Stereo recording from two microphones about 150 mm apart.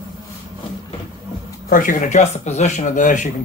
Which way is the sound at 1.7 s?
65° left (ahead or behind).